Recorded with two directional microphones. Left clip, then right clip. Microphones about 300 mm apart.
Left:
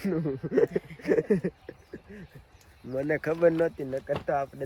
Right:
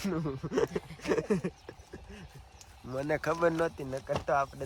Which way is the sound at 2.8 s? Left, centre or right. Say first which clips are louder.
Left 3 dB; centre.